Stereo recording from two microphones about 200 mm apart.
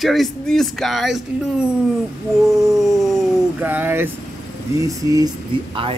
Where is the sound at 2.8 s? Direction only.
Centre (ahead or behind).